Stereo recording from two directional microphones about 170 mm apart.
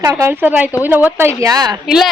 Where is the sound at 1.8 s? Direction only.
Centre (ahead or behind).